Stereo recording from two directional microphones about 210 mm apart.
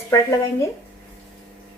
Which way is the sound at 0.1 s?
15° left (ahead or behind).